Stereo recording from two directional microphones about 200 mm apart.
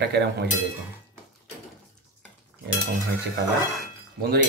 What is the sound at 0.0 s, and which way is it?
Speech, 55° right (ahead or behind).